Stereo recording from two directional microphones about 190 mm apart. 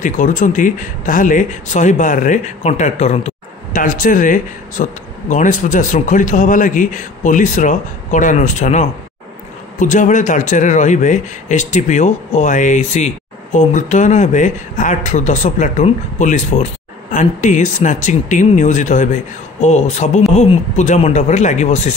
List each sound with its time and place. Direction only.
0.0 s a man's voice: 40° left (ahead or behind)